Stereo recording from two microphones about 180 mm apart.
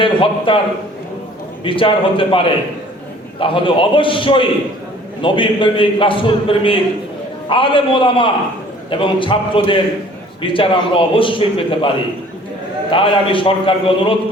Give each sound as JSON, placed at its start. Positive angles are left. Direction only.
{"t": 0.0, "sound": "a man's voice", "side_deg": 30}
{"t": 1.6, "sound": "a man's voice", "side_deg": 30}
{"t": 12.9, "sound": "a man's voice", "side_deg": 30}